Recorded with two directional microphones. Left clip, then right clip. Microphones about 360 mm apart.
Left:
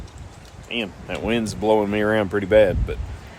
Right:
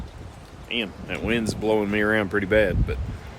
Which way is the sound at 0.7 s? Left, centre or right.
Centre.